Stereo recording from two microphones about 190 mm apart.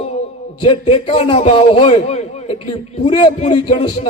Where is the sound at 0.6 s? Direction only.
30° left (ahead or behind).